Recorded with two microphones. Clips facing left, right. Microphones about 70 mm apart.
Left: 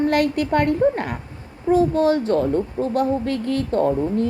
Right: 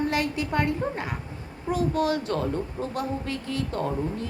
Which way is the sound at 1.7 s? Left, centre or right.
Left.